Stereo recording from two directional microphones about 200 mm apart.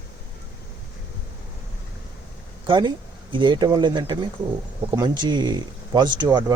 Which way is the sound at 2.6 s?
25° right (ahead or behind).